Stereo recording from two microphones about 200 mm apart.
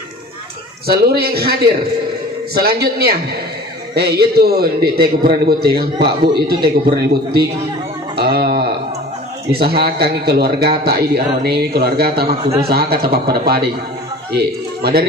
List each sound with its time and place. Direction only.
0.8 s a man's voice: 50° right (ahead or behind)
8.2 s a sound: 50° right (ahead or behind)
9.5 s a man's voice: 50° right (ahead or behind)